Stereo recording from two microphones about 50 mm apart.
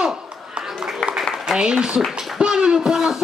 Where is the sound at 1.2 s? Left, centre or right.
Centre.